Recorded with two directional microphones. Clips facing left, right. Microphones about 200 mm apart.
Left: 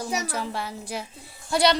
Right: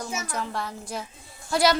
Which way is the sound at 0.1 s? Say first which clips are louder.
Left 4 dB; 35° left (ahead or behind).